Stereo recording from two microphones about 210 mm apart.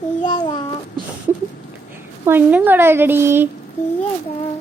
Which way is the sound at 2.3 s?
10° right (ahead or behind).